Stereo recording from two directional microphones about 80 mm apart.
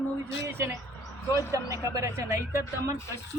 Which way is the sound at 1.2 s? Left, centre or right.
Left.